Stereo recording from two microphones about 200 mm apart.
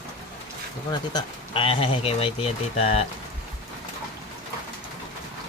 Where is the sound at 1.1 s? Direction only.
25° left (ahead or behind).